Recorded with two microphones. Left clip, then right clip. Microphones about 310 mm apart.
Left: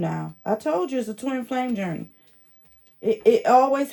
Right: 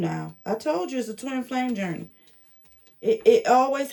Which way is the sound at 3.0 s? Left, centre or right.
Centre.